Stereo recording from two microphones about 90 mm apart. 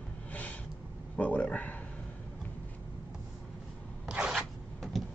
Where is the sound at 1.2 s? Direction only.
15° left (ahead or behind).